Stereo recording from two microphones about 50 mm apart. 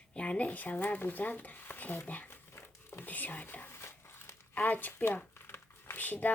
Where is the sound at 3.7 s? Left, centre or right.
Left.